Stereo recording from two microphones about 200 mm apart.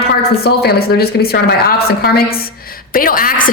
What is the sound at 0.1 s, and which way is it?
Speech, 55° left (ahead or behind).